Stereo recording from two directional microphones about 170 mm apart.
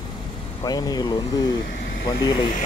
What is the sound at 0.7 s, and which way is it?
Speech, 25° left (ahead or behind).